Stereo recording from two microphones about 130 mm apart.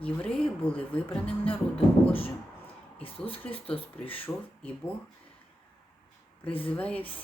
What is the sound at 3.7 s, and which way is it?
Speech, 45° left (ahead or behind).